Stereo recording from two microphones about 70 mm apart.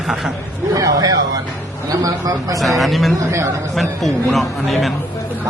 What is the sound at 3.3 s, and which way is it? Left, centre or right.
Speech, right.